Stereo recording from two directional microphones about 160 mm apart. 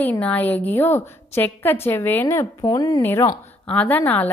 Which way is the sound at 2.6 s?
25° left (ahead or behind).